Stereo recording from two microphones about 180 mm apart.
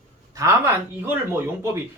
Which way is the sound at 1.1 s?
15° right (ahead or behind).